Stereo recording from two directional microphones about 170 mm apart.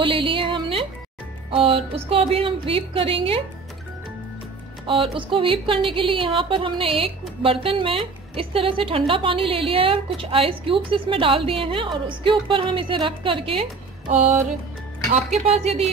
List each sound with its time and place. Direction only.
0.0 s music: 30° right (ahead or behind)
1.5 s a woman's voice: 30° right (ahead or behind)
4.8 s a woman's voice: 30° right (ahead or behind)
14.0 s music: 45° right (ahead or behind)
15.3 s a woman's voice: 40° right (ahead or behind)